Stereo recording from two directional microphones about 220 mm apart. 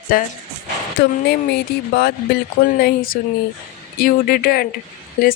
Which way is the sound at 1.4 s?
45° left (ahead or behind).